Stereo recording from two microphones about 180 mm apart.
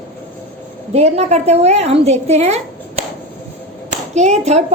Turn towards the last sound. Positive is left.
turn(degrees=-40)  # may be behind; listen again after turning